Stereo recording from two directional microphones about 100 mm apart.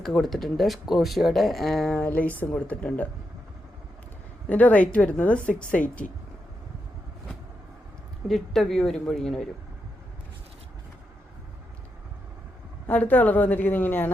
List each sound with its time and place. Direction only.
0.0 s speech: 5° left (ahead or behind)
2.0 s speech: 15° left (ahead or behind)
4.4 s speech: 15° left (ahead or behind)
8.3 s speech: 5° left (ahead or behind)
12.9 s speech: 15° left (ahead or behind)